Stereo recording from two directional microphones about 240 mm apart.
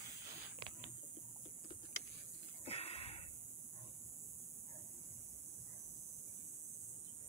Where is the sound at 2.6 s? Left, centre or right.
Left.